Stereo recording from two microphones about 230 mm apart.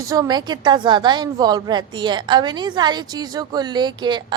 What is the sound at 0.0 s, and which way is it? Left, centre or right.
A woman's voice, centre.